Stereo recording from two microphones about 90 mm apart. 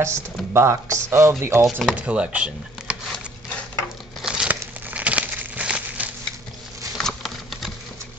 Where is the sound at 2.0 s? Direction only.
10° right (ahead or behind).